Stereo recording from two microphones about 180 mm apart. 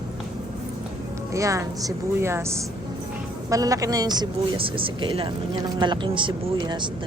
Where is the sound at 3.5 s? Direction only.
20° right (ahead or behind).